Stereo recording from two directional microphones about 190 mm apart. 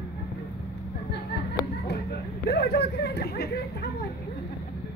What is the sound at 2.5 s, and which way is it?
Speech, 60° left (ahead or behind).